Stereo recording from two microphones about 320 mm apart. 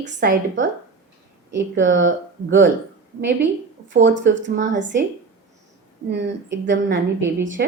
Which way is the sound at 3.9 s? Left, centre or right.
Right.